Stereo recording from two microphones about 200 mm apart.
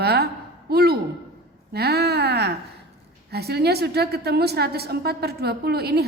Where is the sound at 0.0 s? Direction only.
55° right (ahead or behind).